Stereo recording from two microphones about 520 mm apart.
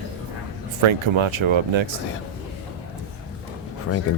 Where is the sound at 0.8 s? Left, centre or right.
Right.